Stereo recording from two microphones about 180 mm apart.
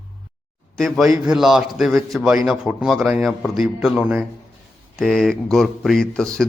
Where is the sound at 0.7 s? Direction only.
Centre (ahead or behind).